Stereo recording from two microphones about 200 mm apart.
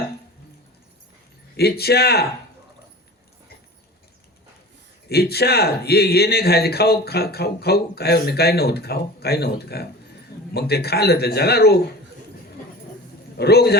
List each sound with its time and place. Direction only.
1.5 s a man's voice: 50° left (ahead or behind)
5.0 s a man's voice: 55° left (ahead or behind)
13.3 s a man's voice: 55° left (ahead or behind)